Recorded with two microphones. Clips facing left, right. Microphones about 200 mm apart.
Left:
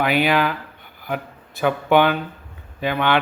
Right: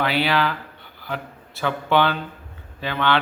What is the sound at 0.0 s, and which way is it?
Speech, 15° left (ahead or behind).